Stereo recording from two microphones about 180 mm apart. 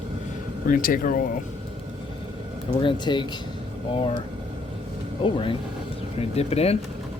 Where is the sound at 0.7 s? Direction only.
50° left (ahead or behind).